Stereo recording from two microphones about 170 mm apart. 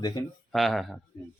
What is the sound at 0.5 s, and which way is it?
Speech, centre (ahead or behind).